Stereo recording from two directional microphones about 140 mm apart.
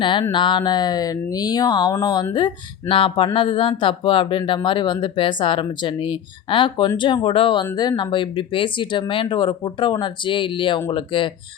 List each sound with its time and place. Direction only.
0.0 s speech: 35° left (ahead or behind)
2.9 s speech: 40° left (ahead or behind)